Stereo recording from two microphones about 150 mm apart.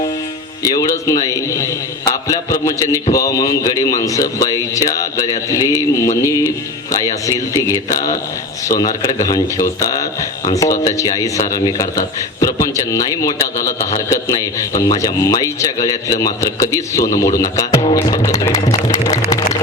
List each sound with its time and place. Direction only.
0.6 s a man's voice: 25° left (ahead or behind)